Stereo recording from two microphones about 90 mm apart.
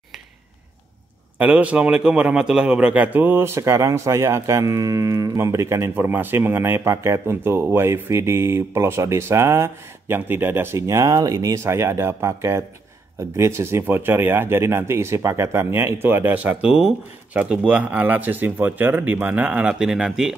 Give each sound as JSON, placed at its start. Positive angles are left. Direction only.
{"t": 1.4, "sound": "a man's voice", "side_deg": -15}
{"t": 19.7, "sound": "speech", "side_deg": -5}